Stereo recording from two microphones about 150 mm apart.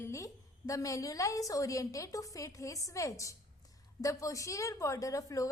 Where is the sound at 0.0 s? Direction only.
20° left (ahead or behind).